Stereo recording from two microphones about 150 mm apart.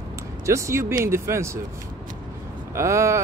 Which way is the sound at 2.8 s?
20° right (ahead or behind).